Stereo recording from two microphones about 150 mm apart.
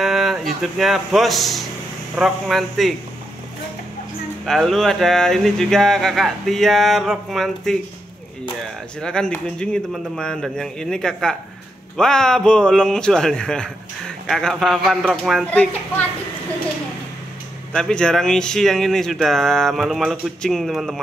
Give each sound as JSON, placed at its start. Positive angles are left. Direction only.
{"t": 0.0, "sound": "a man's voice", "side_deg": 0}
{"t": 4.5, "sound": "a man's voice", "side_deg": 0}
{"t": 9.0, "sound": "a man's voice", "side_deg": 5}
{"t": 17.7, "sound": "a man's voice", "side_deg": 5}